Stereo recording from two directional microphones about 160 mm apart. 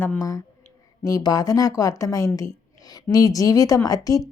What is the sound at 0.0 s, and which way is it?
Speech, 15° left (ahead or behind).